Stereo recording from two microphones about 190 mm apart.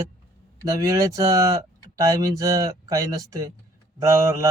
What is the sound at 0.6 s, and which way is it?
Speech, 20° right (ahead or behind).